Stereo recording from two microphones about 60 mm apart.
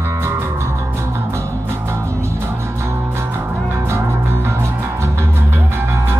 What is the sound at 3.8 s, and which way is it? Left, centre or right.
Music, right.